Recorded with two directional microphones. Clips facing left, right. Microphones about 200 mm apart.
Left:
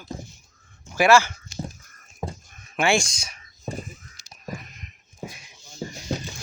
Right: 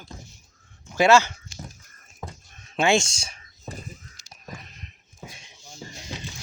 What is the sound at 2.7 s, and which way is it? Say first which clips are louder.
Speech: right 1 dB; 20° right (ahead or behind).